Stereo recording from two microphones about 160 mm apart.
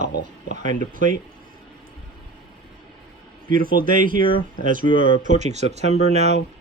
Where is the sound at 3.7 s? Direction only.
60° right (ahead or behind); by 6.4 s 45° right (ahead or behind).